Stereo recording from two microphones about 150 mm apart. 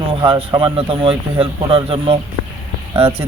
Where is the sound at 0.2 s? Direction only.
30° right (ahead or behind).